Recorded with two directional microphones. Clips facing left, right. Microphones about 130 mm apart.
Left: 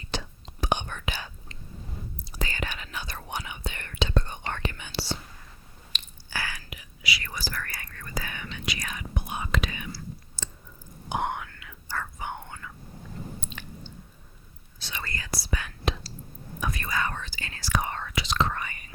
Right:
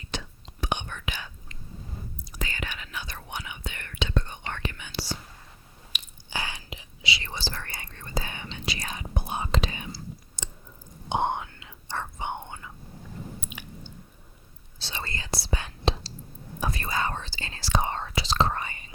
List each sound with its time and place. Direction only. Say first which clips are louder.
0.1 s whispering: left 2 dB; 35° left (ahead or behind)
5.9 s a sound: even; 5° right (ahead or behind)
6.3 s whispering: right 1 dB; 20° right (ahead or behind)
13.4 s chewing: left 1 dB; 10° right (ahead or behind)
14.8 s whispering: right 1 dB; 30° right (ahead or behind)